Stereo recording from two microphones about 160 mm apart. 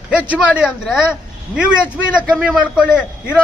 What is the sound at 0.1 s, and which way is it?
Speech, 5° right (ahead or behind).